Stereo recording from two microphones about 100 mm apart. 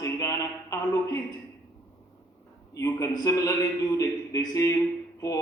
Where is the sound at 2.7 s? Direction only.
35° left (ahead or behind).